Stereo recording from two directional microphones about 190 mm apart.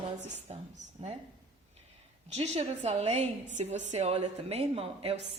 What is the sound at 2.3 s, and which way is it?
A woman's voice, 35° right (ahead or behind).